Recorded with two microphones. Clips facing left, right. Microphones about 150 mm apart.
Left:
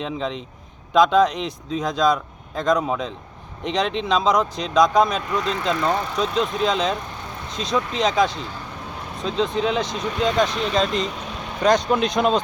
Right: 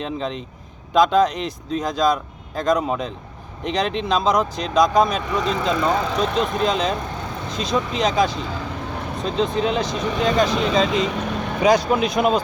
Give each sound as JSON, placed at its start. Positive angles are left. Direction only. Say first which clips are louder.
{"t": 0.0, "sound": "speech", "louder": "even", "side_deg": 0}
{"t": 11.0, "sound": "vehicle", "louder": "right 6 dB", "side_deg": -65}
{"t": 11.6, "sound": "speech", "louder": "right 1 dB", "side_deg": -5}